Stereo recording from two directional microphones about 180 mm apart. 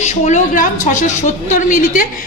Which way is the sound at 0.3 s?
45° left (ahead or behind).